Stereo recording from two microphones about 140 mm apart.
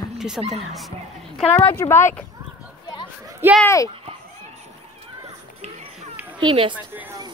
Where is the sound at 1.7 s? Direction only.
15° left (ahead or behind).